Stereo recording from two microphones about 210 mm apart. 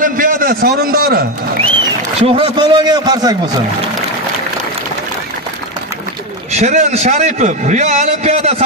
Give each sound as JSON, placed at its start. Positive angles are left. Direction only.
{"t": 0.0, "sound": "a man's voice", "side_deg": -40}
{"t": 1.6, "sound": "a man's voice", "side_deg": -25}
{"t": 6.5, "sound": "a man's voice", "side_deg": -35}